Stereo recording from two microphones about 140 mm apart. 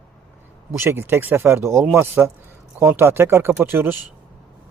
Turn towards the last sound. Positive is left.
turn(degrees=-15)  # may be behind; listen again after turning